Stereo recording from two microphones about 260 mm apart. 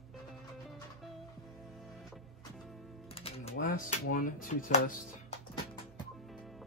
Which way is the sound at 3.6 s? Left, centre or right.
Left.